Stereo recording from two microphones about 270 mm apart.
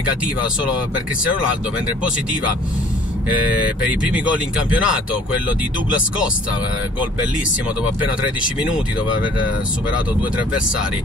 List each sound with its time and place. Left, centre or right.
3.4 s speech: centre